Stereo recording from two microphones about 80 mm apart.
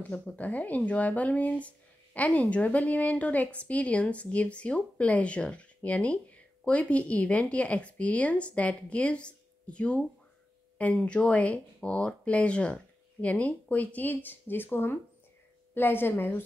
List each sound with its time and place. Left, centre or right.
0.4 s a woman's voice: centre